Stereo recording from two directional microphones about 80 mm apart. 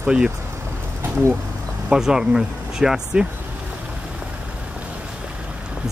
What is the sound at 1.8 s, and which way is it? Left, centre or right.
Speech, centre.